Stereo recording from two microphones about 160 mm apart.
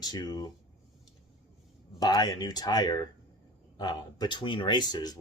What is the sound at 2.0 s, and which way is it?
Speech, 25° left (ahead or behind).